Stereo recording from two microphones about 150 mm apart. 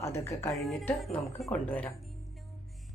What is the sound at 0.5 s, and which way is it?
Speech, centre (ahead or behind).